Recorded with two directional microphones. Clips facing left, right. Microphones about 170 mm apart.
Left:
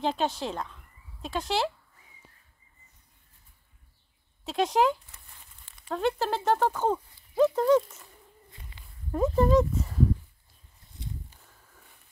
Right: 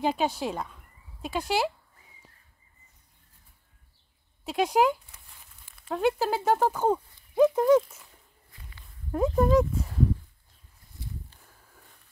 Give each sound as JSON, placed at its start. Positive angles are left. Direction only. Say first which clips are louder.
{"t": 0.0, "sound": "speech", "louder": "right 2 dB", "side_deg": -10}
{"t": 4.5, "sound": "speech", "louder": "right 1 dB", "side_deg": -10}
{"t": 9.1, "sound": "speech", "louder": "even", "side_deg": 0}
{"t": 9.8, "sound": "a sound", "louder": "left 1 dB", "side_deg": 0}
{"t": 11.0, "sound": "a sound", "louder": "left 2 dB", "side_deg": 20}
{"t": 11.4, "sound": "sniff", "louder": "right 1 dB", "side_deg": 0}